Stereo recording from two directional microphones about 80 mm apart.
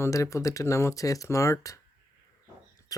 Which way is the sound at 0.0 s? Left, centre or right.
Left.